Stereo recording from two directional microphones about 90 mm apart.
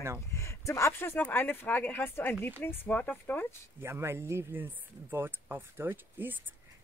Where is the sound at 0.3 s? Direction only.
35° left (ahead or behind); by 3.4 s 15° left (ahead or behind).